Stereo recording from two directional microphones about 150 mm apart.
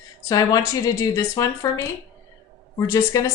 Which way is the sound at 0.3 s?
25° left (ahead or behind).